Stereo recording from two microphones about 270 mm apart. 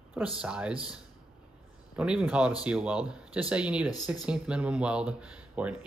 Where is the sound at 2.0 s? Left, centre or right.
Centre.